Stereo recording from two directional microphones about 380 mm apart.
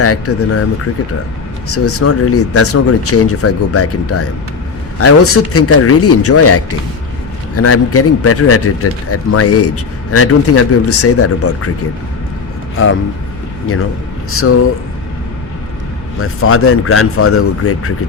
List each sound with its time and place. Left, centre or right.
0.0 s speech: left
1.7 s speech: left
12.7 s speech: left
14.3 s speech: left
16.2 s speech: left